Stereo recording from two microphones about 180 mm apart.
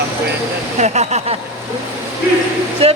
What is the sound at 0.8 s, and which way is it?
Speech, 40° right (ahead or behind).